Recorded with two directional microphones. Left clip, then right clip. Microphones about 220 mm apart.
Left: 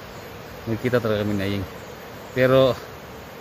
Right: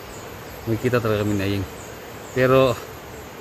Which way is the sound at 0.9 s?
Centre (ahead or behind).